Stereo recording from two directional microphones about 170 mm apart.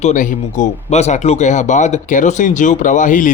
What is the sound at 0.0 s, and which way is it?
Speech, 45° left (ahead or behind).